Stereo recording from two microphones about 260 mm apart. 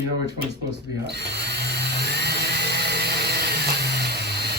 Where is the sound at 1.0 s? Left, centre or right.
Right.